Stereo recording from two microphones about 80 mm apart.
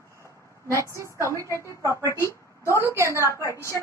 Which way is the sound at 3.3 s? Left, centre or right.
Left.